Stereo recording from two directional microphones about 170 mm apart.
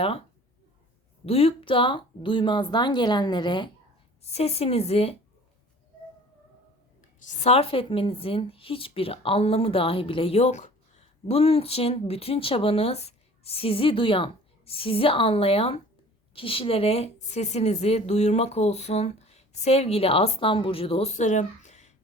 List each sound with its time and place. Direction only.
1.2 s speech: 35° left (ahead or behind)
4.2 s a woman's voice: 40° left (ahead or behind)
7.2 s a woman's voice: 45° left (ahead or behind)